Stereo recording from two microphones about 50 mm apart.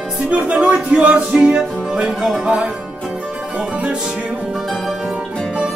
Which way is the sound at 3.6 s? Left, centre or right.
Right.